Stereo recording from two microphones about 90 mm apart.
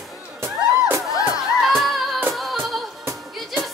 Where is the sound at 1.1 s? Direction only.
45° left (ahead or behind).